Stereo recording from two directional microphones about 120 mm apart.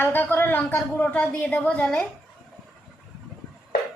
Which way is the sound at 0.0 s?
15° left (ahead or behind).